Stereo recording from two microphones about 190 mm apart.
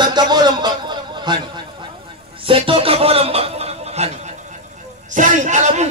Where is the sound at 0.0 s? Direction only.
20° right (ahead or behind).